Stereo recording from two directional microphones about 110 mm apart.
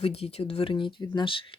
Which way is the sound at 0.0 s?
65° left (ahead or behind).